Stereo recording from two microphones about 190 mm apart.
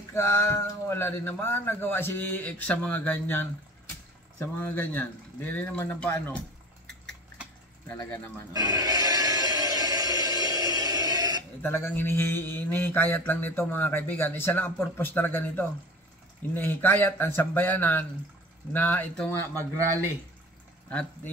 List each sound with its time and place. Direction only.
0.1 s a man's voice: 15° left (ahead or behind)
7.9 s a man's voice: 10° left (ahead or behind)
8.5 s a sound: 20° right (ahead or behind)
11.6 s a man's voice: 10° left (ahead or behind)
20.9 s speech: 5° left (ahead or behind)